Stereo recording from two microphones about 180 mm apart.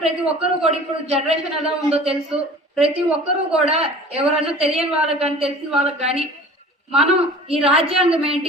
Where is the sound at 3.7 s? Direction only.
35° right (ahead or behind).